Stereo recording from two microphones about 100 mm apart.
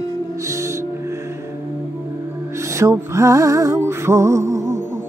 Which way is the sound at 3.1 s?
30° right (ahead or behind).